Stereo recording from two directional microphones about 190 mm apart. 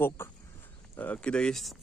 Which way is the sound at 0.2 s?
10° left (ahead or behind).